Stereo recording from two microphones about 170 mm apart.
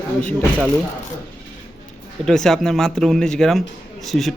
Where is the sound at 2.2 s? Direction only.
5° left (ahead or behind).